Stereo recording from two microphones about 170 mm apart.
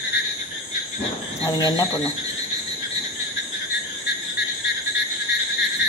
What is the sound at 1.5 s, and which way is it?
Speech, 20° left (ahead or behind).